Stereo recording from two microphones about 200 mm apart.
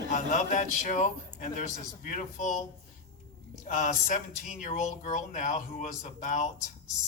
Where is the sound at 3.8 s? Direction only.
40° left (ahead or behind).